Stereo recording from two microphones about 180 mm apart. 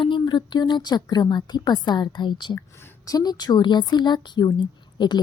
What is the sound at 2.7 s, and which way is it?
A woman's voice, 15° left (ahead or behind).